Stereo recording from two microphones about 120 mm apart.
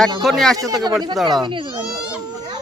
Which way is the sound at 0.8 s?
35° right (ahead or behind).